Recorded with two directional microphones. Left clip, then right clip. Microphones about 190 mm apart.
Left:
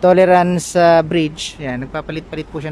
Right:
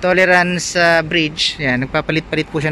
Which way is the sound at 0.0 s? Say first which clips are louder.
Left 2 dB; 20° left (ahead or behind).